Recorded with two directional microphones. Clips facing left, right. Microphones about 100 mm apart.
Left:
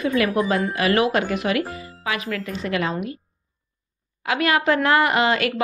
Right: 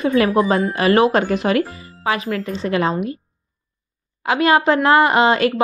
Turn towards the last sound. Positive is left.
turn(degrees=-30)  # may be behind; listen again after turning